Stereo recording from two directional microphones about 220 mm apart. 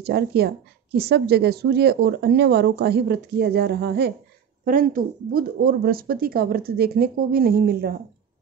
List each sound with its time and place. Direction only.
0.0 s speech: 50° right (ahead or behind)